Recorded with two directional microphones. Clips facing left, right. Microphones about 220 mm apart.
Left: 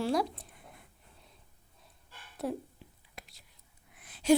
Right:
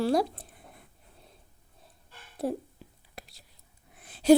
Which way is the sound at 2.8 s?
40° right (ahead or behind).